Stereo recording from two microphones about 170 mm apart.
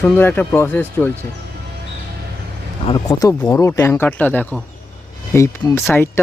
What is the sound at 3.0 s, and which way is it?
Speech, 20° left (ahead or behind).